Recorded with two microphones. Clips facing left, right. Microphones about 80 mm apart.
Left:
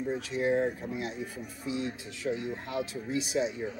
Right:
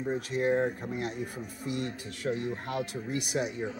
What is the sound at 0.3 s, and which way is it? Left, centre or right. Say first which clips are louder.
Speech: even; right.